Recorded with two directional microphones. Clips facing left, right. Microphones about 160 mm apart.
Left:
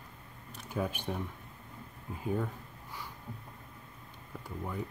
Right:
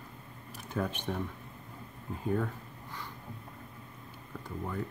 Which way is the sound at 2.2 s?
10° left (ahead or behind).